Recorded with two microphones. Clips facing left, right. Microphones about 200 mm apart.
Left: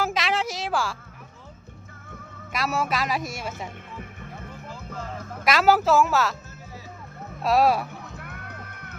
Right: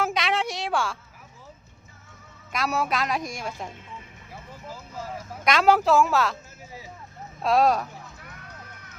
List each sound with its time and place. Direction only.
0.0 s a sound: centre (ahead or behind)
2.5 s speech: centre (ahead or behind)
5.5 s speech: centre (ahead or behind)
7.4 s speech: 5° left (ahead or behind)
8.1 s music: 60° left (ahead or behind)